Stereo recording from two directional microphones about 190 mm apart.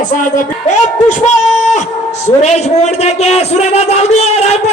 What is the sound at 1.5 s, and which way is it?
Music, 40° left (ahead or behind).